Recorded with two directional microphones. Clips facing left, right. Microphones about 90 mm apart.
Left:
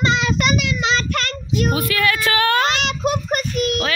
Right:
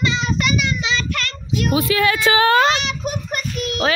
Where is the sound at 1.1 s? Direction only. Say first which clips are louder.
Left 2 dB; 45° left (ahead or behind).